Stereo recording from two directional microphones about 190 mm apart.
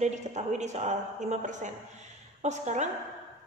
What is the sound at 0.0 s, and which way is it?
A woman's voice, 40° right (ahead or behind).